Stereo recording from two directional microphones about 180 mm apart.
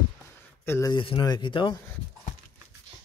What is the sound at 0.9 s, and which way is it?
Speech, 25° left (ahead or behind).